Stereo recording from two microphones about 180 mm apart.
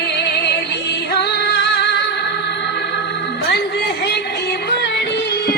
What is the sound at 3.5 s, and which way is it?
Music, 70° left (ahead or behind).